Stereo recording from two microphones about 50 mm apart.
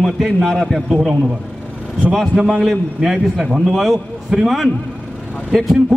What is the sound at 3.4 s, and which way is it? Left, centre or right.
Speech, centre.